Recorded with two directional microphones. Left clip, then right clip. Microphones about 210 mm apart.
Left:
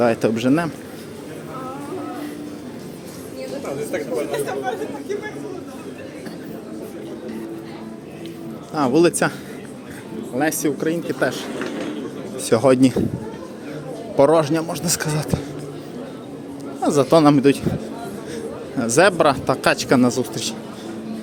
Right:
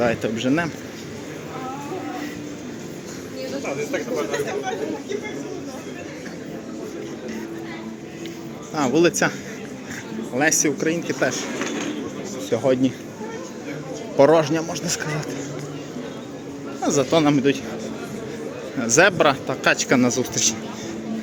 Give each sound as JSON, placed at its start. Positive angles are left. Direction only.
{"t": 0.0, "sound": "a man's voice", "side_deg": 20}
{"t": 3.9, "sound": "speech", "side_deg": 55}
{"t": 8.7, "sound": "a man's voice", "side_deg": 15}
{"t": 10.3, "sound": "a man's voice", "side_deg": 10}
{"t": 12.5, "sound": "speech", "side_deg": 40}
{"t": 14.2, "sound": "a man's voice", "side_deg": 15}
{"t": 16.8, "sound": "a man's voice", "side_deg": 20}
{"t": 18.9, "sound": "a man's voice", "side_deg": 15}